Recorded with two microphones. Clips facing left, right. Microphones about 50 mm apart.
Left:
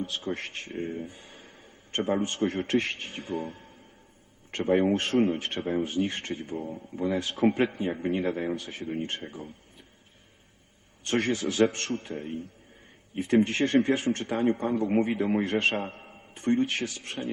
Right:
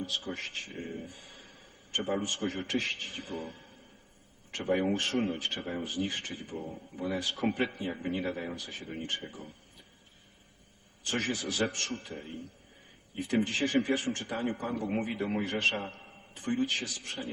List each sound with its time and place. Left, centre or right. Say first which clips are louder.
0.0 s speech: left 4 dB; left
11.0 s speech: left 6 dB; left